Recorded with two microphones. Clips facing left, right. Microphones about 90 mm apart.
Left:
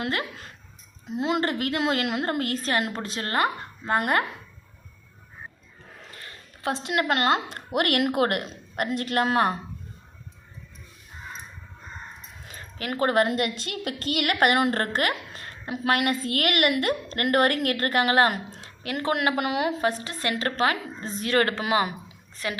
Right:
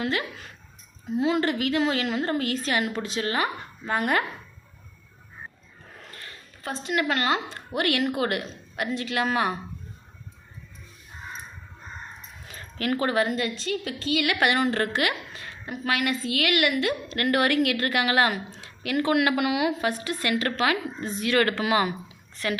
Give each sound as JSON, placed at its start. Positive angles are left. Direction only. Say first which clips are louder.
{"t": 0.0, "sound": "a woman's voice", "louder": "right 1 dB", "side_deg": 45}
{"t": 6.6, "sound": "a woman's voice", "louder": "left 4 dB", "side_deg": 75}
{"t": 6.9, "sound": "speech", "louder": "left 1 dB", "side_deg": 45}
{"t": 7.5, "sound": "a woman's voice", "louder": "left 2 dB", "side_deg": 60}
{"t": 12.5, "sound": "dog", "louder": "right 5 dB", "side_deg": 20}
{"t": 13.0, "sound": "a woman's voice", "louder": "left 4 dB", "side_deg": 45}
{"t": 14.3, "sound": "speech", "louder": "left 4 dB", "side_deg": 45}
{"t": 15.6, "sound": "a woman's voice", "louder": "left 3 dB", "side_deg": 75}
{"t": 15.9, "sound": "a woman's voice", "louder": "left 2 dB", "side_deg": 50}